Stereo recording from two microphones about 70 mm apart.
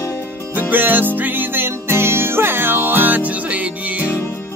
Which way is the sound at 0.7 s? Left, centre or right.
Right.